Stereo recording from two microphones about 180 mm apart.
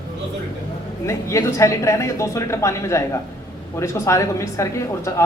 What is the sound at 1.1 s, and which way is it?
A man's voice, 15° left (ahead or behind).